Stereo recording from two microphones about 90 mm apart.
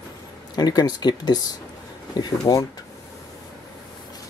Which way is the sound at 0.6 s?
50° left (ahead or behind).